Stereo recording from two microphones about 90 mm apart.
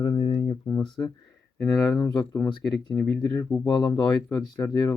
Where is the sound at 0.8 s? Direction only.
50° left (ahead or behind).